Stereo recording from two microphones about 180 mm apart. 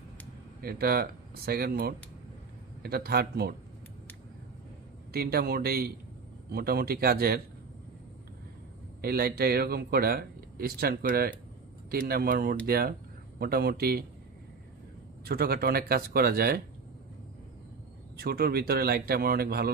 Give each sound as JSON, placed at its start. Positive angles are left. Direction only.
{"t": 0.6, "sound": "a man's voice", "side_deg": -60}
{"t": 5.1, "sound": "a man's voice", "side_deg": -60}
{"t": 9.0, "sound": "a man's voice", "side_deg": -60}
{"t": 15.2, "sound": "a man's voice", "side_deg": -60}
{"t": 18.1, "sound": "a man's voice", "side_deg": -60}